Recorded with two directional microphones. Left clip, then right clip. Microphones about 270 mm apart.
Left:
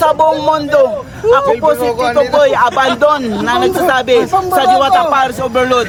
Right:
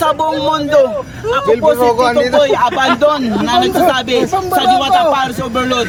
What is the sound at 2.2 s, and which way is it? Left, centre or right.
Speech, centre.